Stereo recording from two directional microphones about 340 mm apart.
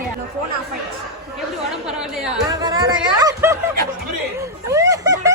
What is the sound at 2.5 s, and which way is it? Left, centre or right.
Speech, centre.